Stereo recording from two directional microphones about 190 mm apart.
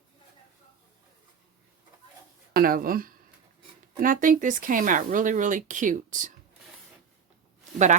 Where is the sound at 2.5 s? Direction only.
50° right (ahead or behind).